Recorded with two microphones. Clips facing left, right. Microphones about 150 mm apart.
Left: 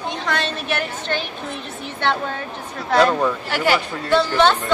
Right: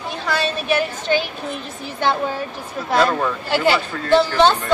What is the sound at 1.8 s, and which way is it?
Speech, 10° right (ahead or behind).